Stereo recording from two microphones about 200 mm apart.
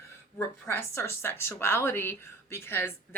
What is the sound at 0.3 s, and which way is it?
Speech, 10° left (ahead or behind).